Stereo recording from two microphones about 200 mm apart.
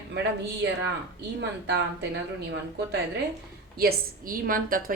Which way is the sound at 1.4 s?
55° right (ahead or behind).